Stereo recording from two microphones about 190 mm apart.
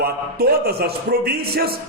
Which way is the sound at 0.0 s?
55° right (ahead or behind).